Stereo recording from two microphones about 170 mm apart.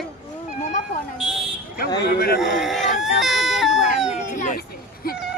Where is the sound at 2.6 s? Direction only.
Centre (ahead or behind).